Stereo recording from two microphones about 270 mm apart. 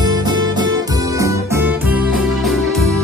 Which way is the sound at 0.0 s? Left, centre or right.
Centre.